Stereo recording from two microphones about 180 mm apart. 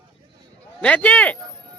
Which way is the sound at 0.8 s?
5° left (ahead or behind).